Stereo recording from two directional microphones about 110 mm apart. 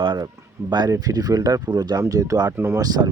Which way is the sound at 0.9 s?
35° right (ahead or behind).